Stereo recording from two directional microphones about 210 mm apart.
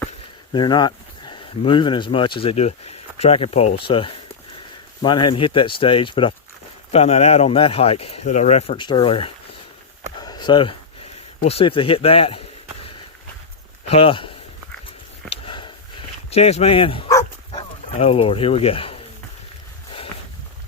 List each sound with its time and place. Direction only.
0.5 s speech: 20° left (ahead or behind)
10.2 s a sound: 20° left (ahead or behind)
11.4 s speech: 25° left (ahead or behind)
13.9 s speech: 25° left (ahead or behind)
14.8 s a sound: 25° left (ahead or behind)
16.3 s speech: 30° left (ahead or behind)